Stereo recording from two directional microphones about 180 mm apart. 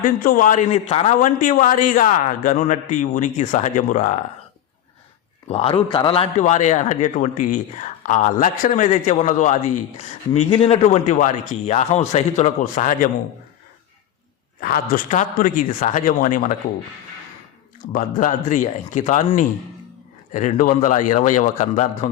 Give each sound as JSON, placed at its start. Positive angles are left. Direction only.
{"t": 0.0, "sound": "a man's voice", "side_deg": 50}
{"t": 5.5, "sound": "a man's voice", "side_deg": 35}
{"t": 14.6, "sound": "a man's voice", "side_deg": 50}
{"t": 17.9, "sound": "a man's voice", "side_deg": 45}
{"t": 20.3, "sound": "a man's voice", "side_deg": 45}